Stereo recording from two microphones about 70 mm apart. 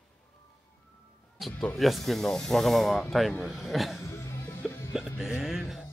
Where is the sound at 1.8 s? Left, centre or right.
Centre.